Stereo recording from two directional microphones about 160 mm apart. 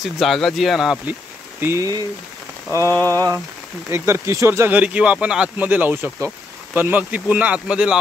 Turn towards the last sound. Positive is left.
turn(degrees=-5)  # may be behind; listen again after turning